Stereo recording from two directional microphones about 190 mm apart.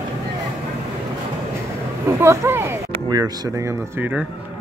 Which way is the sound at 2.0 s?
15° right (ahead or behind).